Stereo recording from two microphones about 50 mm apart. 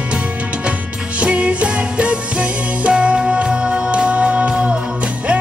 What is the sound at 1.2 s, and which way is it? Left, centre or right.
Music, right.